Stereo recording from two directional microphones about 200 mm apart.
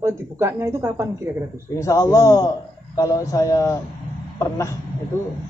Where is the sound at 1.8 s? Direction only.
15° left (ahead or behind).